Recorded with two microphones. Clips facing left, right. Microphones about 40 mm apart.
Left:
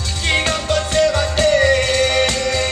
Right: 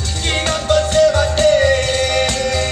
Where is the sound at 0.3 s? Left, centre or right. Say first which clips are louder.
Right 1 dB; centre.